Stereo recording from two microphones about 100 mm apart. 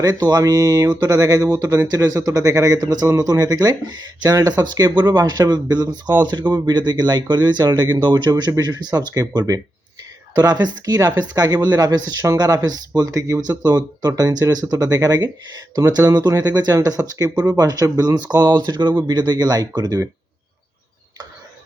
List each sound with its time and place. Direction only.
0.0 s speech: 40° right (ahead or behind)
10.3 s speech: 40° right (ahead or behind)